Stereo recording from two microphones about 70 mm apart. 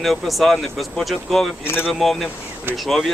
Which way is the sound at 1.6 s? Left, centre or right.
Left.